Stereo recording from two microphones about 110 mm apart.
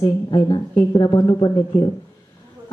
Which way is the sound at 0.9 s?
40° left (ahead or behind).